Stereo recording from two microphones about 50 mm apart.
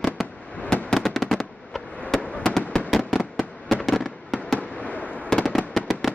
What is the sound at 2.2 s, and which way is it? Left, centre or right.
Fireworks, left.